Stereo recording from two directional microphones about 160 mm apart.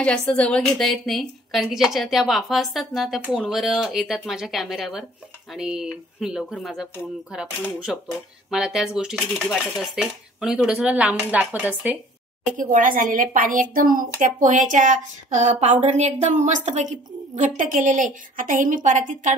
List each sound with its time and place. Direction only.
0.2 s a woman's voice: 5° left (ahead or behind); by 12.0 s 10° right (ahead or behind)
12.5 s a woman's voice: 55° right (ahead or behind)